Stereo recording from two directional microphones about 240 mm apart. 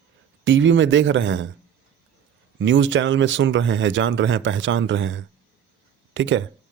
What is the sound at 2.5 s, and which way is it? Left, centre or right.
Speech, right.